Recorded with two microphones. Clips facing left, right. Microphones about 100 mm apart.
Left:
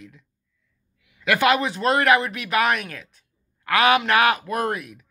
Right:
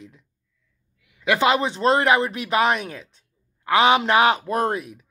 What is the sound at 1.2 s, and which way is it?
Speech, 25° right (ahead or behind).